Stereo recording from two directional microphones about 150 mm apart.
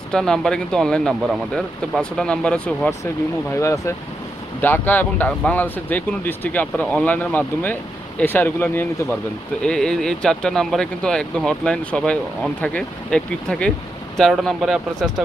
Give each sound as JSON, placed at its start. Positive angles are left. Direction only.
{"t": 0.1, "sound": "speech", "side_deg": 5}
{"t": 3.5, "sound": "speech", "side_deg": 20}